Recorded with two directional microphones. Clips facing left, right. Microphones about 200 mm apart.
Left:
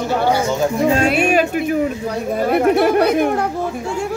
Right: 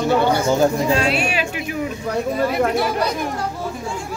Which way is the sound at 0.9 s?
50° left (ahead or behind).